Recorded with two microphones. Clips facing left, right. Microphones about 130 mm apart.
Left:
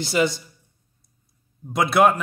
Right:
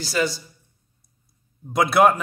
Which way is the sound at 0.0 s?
20° left (ahead or behind).